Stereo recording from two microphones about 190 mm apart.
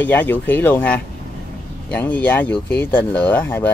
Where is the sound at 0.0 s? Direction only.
10° left (ahead or behind).